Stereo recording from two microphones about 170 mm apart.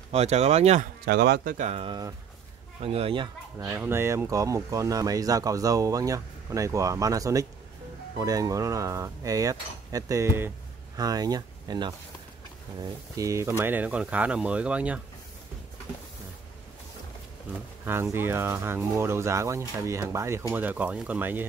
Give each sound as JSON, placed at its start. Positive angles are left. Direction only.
{"t": 0.1, "sound": "speech", "side_deg": -40}
{"t": 1.0, "sound": "speech", "side_deg": -65}
{"t": 1.7, "sound": "speech", "side_deg": -35}
{"t": 3.5, "sound": "speech", "side_deg": -20}
{"t": 17.8, "sound": "speech", "side_deg": -15}